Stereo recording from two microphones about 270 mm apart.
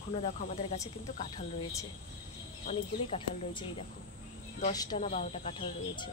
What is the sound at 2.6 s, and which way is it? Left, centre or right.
Speech, left.